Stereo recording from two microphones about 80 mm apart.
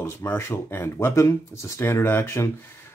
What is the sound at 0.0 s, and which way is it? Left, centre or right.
Speech, left.